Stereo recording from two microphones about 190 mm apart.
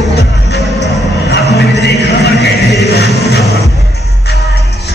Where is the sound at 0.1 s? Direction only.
60° left (ahead or behind).